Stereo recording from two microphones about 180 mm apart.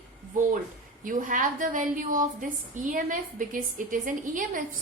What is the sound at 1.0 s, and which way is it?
A woman's voice, 45° right (ahead or behind).